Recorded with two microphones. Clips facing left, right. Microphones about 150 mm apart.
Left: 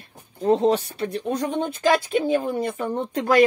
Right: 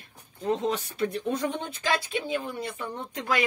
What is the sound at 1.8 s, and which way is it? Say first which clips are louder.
Speech: left 9 dB; 50° left (ahead or behind).